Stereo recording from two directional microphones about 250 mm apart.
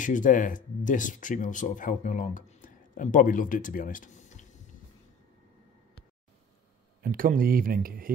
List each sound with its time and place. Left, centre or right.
0.0 s speech: left
7.0 s speech: right